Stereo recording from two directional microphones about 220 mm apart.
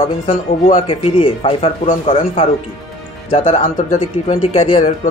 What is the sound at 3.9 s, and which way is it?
A man's voice, 30° left (ahead or behind).